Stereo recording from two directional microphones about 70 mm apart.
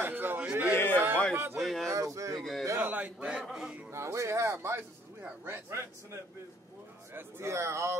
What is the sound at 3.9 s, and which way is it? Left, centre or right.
Speech, right.